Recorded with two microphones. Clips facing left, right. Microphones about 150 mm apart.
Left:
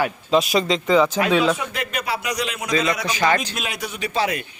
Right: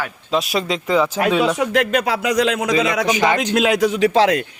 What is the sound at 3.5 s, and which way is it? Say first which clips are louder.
Speech: right 14 dB; 90° right.